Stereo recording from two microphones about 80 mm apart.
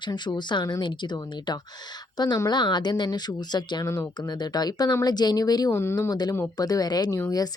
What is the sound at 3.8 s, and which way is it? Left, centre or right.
Speech, left.